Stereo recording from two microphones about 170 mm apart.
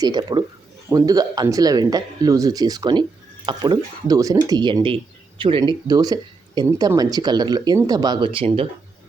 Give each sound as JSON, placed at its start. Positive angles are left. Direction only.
{"t": 0.0, "sound": "speech", "side_deg": -25}